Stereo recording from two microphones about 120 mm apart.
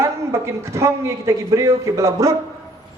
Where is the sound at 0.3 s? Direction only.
20° right (ahead or behind).